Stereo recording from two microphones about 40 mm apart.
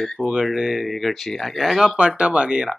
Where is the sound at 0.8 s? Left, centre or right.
Centre.